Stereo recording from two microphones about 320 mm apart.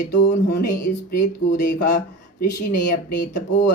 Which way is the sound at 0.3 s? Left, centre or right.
Left.